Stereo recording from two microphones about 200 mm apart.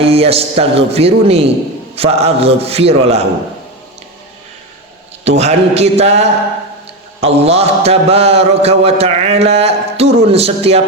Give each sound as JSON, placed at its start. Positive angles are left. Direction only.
{"t": 0.0, "sound": "a man's voice", "side_deg": -30}
{"t": 5.2, "sound": "a man's voice", "side_deg": -35}